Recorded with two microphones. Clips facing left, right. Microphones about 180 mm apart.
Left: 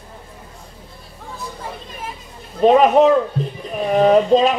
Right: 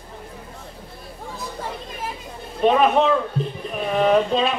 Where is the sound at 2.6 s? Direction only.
40° left (ahead or behind).